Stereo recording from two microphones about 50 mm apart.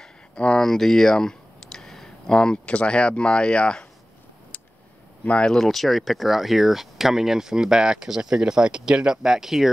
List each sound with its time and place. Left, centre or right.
0.0 s clicking: centre
5.2 s speech: left
5.6 s speech: centre